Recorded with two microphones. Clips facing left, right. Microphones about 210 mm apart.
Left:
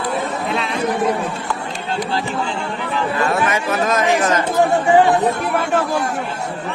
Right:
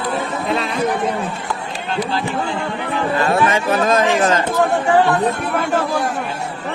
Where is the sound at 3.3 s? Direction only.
30° right (ahead or behind).